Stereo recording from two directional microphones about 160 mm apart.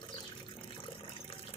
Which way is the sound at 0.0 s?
35° left (ahead or behind).